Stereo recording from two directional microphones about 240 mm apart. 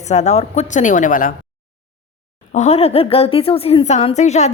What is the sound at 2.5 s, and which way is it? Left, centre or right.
A woman's voice, left.